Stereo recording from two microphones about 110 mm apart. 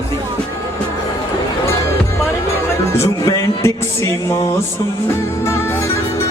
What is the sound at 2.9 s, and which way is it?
Music, 25° left (ahead or behind).